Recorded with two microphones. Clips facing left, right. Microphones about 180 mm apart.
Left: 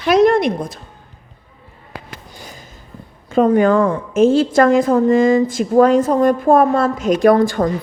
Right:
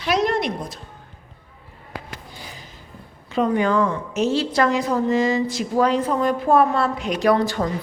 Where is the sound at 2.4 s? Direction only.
45° left (ahead or behind).